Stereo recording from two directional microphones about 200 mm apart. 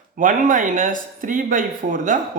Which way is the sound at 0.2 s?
40° right (ahead or behind).